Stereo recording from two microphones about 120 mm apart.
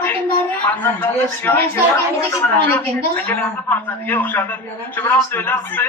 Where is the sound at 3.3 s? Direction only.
15° left (ahead or behind).